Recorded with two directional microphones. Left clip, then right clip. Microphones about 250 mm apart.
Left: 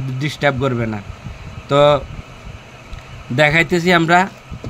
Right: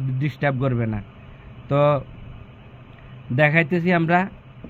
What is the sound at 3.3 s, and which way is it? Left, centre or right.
Speech, centre.